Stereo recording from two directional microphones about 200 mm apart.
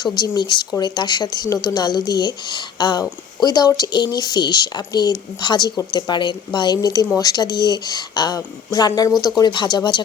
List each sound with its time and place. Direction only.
0.0 s speech: 20° left (ahead or behind)